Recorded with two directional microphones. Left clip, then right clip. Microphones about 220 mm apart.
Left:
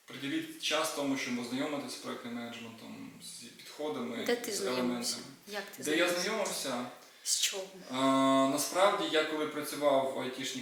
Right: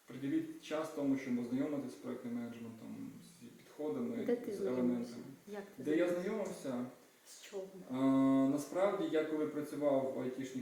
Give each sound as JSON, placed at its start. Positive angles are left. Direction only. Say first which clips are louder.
{"t": 0.1, "sound": "speech", "louder": "left 2 dB", "side_deg": -5}
{"t": 3.8, "sound": "speech", "louder": "left 4 dB", "side_deg": -10}
{"t": 7.9, "sound": "speech", "louder": "left 6 dB", "side_deg": -5}